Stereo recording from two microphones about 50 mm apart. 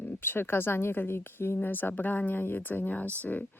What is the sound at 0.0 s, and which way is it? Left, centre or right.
Speech, left.